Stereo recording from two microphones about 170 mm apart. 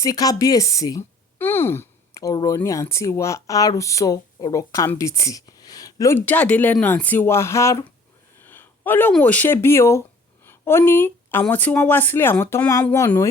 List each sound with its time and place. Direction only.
0.0 s speech: 20° left (ahead or behind)